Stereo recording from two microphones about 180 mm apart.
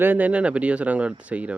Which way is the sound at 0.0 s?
10° right (ahead or behind).